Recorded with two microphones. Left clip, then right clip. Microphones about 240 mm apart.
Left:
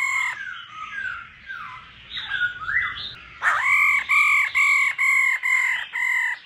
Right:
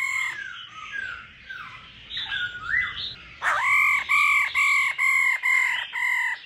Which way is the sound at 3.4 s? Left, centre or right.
Centre.